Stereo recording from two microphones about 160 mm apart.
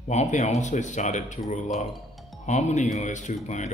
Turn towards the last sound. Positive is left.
turn(degrees=50)  # may be behind; listen again after turning